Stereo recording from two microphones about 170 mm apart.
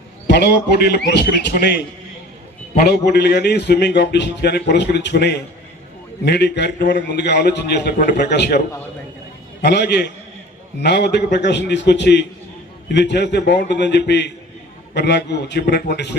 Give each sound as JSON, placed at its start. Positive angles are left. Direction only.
{"t": 0.3, "sound": "a man's voice", "side_deg": 70}
{"t": 3.1, "sound": "a man's voice", "side_deg": 75}